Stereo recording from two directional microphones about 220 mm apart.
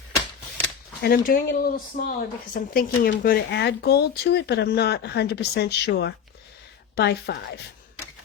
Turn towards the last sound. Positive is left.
turn(degrees=45)  # may be behind; listen again after turning